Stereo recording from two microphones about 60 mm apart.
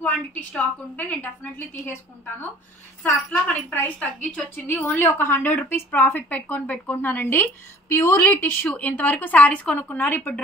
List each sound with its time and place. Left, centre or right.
0.0 s speech: left
3.3 s speech: left
5.0 s a woman's voice: left
7.9 s a woman's voice: left
8.6 s speech: left